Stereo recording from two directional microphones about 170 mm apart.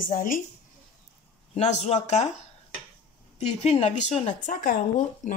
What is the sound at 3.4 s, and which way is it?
Speech, 40° left (ahead or behind).